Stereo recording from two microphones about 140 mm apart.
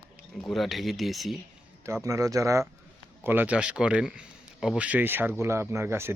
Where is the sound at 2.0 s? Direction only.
25° right (ahead or behind).